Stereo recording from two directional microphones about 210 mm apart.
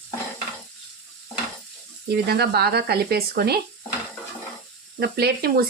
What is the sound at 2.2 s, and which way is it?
A woman's voice, 50° right (ahead or behind).